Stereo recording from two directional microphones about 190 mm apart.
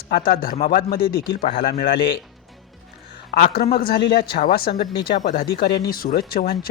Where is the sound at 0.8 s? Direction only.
50° left (ahead or behind).